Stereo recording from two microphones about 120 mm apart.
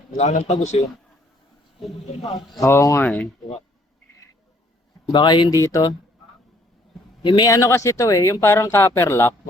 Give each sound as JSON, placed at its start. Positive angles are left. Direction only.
{"t": 0.2, "sound": "speech", "side_deg": 75}
{"t": 2.6, "sound": "speech", "side_deg": 25}
{"t": 5.0, "sound": "speech", "side_deg": 40}
{"t": 7.2, "sound": "speech", "side_deg": 40}